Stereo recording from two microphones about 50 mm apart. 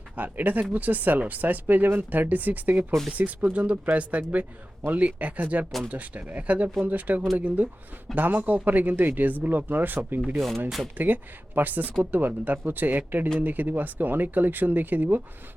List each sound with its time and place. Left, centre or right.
0.2 s speech: right
10.3 s speech: centre
10.9 s speech: right